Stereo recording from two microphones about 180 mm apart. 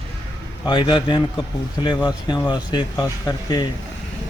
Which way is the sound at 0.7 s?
25° left (ahead or behind).